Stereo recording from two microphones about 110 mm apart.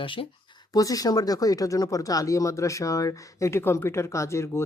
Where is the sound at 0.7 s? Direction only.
35° left (ahead or behind).